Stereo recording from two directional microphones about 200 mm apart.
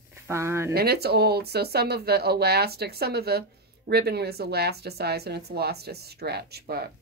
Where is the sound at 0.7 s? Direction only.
50° right (ahead or behind).